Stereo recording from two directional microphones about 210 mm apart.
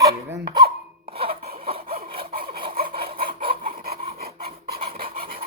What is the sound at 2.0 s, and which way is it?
Sawing, 25° right (ahead or behind).